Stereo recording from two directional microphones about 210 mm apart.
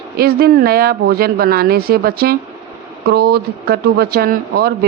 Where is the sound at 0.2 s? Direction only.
45° right (ahead or behind).